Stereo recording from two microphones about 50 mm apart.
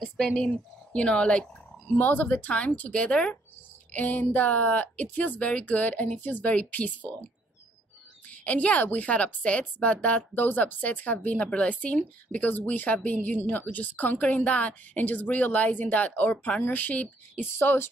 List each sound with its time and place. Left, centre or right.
0.2 s speech: centre
0.5 s speech: left
2.0 s a woman's voice: left
8.3 s a woman's voice: left